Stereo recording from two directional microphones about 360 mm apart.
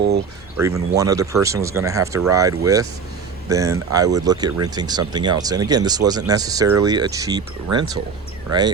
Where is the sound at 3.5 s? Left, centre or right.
Centre.